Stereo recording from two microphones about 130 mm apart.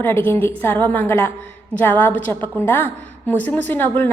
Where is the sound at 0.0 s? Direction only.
15° left (ahead or behind).